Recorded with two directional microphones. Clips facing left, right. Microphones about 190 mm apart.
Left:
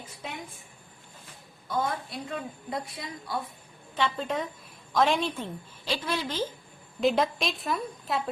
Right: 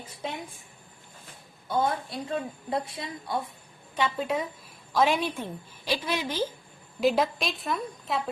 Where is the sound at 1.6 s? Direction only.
25° right (ahead or behind).